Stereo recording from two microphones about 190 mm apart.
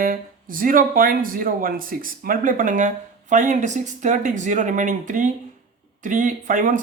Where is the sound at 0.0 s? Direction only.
50° right (ahead or behind).